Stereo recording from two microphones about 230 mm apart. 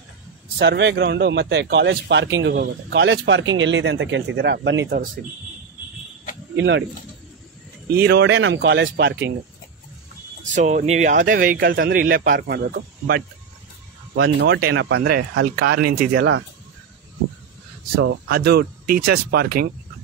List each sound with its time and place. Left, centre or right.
0.6 s speech: right
6.5 s speech: right
8.0 s speech: right
10.4 s speech: right
18.0 s speech: right